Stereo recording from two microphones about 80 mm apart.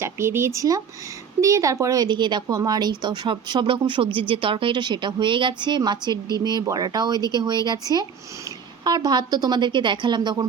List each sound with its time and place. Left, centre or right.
0.0 s speech: right
2.0 s speech: right
2.6 s speech: right
3.0 s a woman's voice: right